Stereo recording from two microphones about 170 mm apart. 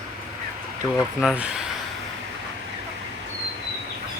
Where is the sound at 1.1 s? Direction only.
5° right (ahead or behind).